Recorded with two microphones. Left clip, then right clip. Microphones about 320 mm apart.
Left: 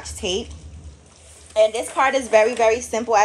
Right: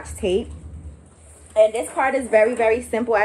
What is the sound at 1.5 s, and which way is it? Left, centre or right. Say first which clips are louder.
A woman's voice: right 1 dB; left.